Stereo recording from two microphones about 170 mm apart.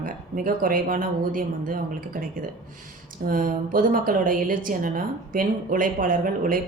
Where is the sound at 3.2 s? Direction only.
55° right (ahead or behind).